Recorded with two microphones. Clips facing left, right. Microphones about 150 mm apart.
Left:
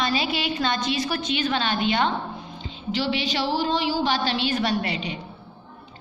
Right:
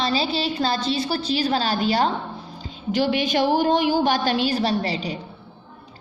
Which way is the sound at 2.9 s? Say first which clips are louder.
Right 5 dB; 50° right (ahead or behind).